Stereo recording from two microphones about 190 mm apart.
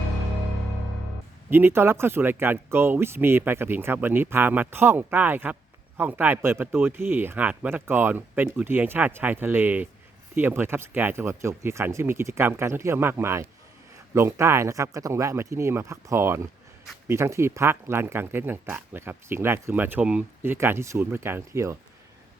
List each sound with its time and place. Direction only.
1.5 s speech: 10° right (ahead or behind)